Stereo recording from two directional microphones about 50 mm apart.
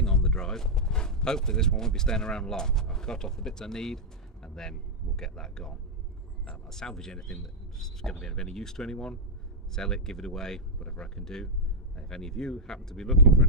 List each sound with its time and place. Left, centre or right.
0.0 s speech: centre